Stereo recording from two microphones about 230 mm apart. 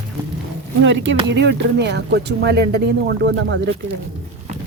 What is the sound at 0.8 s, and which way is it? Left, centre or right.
Speech, right.